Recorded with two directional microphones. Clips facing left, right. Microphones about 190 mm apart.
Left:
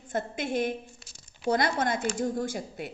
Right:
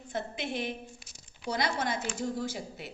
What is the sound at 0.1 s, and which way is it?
A woman's voice, 50° left (ahead or behind).